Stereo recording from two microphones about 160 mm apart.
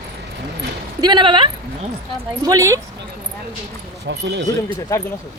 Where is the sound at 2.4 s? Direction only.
20° right (ahead or behind).